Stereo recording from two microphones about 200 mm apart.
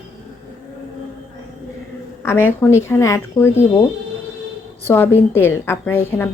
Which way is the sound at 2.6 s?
15° left (ahead or behind).